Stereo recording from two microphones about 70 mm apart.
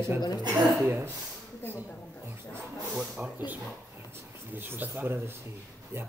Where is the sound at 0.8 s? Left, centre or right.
Right.